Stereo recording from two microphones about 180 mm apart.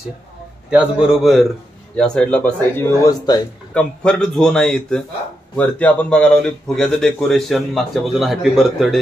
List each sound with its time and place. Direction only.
0.7 s a man's voice: 5° right (ahead or behind); by 3.3 s 15° left (ahead or behind)
3.7 s a man's voice: 5° left (ahead or behind)